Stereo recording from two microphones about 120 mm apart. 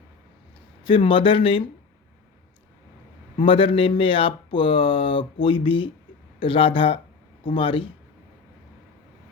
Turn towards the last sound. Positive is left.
turn(degrees=45)  # may be behind; listen again after turning